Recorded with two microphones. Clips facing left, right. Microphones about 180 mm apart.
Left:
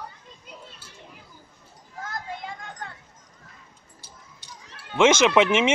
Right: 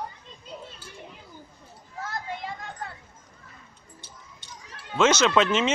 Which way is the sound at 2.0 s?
5° right (ahead or behind).